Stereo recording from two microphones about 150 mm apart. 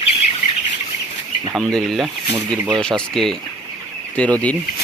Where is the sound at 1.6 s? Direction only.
5° left (ahead or behind).